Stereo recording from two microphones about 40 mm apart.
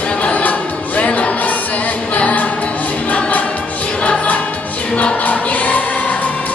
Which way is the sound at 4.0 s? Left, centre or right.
Left.